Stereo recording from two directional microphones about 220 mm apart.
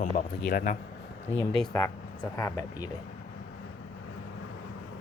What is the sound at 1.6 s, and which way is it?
Speech, 5° left (ahead or behind).